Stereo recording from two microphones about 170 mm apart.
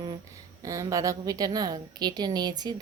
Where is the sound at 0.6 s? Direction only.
20° right (ahead or behind).